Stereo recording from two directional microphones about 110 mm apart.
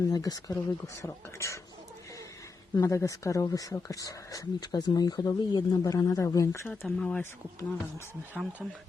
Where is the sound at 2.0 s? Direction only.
30° left (ahead or behind).